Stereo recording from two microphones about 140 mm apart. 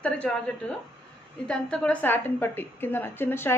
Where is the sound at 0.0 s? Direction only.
10° left (ahead or behind).